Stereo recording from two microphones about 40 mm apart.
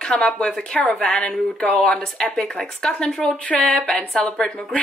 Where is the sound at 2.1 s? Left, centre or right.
Centre.